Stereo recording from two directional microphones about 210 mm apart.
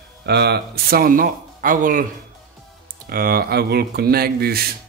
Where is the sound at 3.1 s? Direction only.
45° right (ahead or behind).